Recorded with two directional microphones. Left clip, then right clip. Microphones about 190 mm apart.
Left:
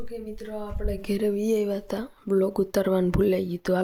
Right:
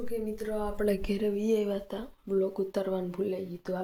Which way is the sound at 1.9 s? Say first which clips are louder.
Left 6 dB; 30° left (ahead or behind).